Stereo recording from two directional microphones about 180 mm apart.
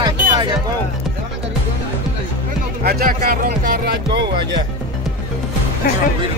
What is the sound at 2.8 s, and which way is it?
Music, 55° right (ahead or behind).